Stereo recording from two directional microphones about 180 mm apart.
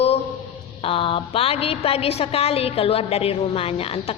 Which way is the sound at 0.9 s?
30° left (ahead or behind).